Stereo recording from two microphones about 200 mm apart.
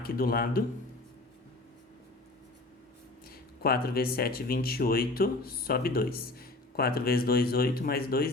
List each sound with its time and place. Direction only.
0.0 s speech: 50° left (ahead or behind)
3.6 s speech: 50° left (ahead or behind)